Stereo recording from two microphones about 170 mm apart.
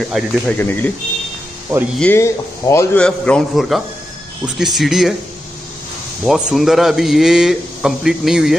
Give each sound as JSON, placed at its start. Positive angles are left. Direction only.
{"t": 0.1, "sound": "a man's voice", "side_deg": 0}
{"t": 0.6, "sound": "speech", "side_deg": 10}
{"t": 2.0, "sound": "speech", "side_deg": 15}
{"t": 3.0, "sound": "a man's voice", "side_deg": 5}
{"t": 6.2, "sound": "a man's voice", "side_deg": 0}